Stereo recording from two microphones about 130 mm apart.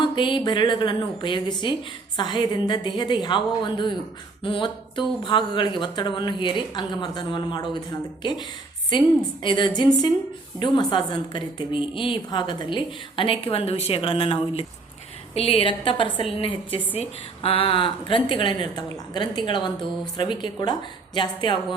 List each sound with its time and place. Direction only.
0.0 s a woman's voice: 35° left (ahead or behind)